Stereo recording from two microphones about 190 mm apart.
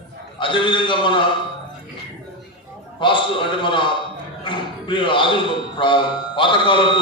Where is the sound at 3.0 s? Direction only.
25° left (ahead or behind).